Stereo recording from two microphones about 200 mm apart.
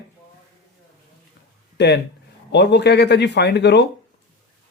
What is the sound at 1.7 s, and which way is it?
Speech, 55° left (ahead or behind).